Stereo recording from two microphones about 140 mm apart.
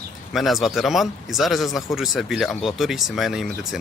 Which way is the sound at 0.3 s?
Centre (ahead or behind).